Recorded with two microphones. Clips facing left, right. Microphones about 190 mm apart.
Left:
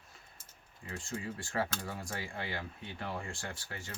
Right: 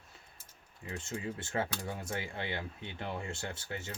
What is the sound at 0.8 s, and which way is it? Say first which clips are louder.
Speech: right 1 dB; 20° right (ahead or behind).